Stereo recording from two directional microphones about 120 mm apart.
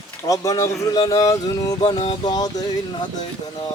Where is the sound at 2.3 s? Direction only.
35° left (ahead or behind).